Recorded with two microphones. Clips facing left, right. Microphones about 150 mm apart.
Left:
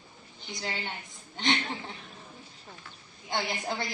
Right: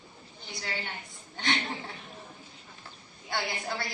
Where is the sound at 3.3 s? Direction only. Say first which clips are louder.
Left 1 dB; 20° left (ahead or behind).